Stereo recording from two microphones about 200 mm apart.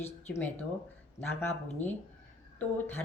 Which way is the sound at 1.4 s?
10° left (ahead or behind).